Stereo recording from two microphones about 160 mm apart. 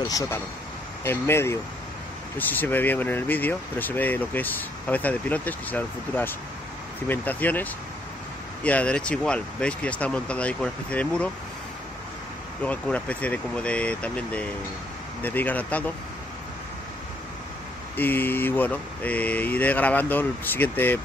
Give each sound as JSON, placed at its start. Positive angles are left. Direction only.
{"t": 1.0, "sound": "speech", "side_deg": 15}
{"t": 12.6, "sound": "speech", "side_deg": 10}
{"t": 17.9, "sound": "speech", "side_deg": 10}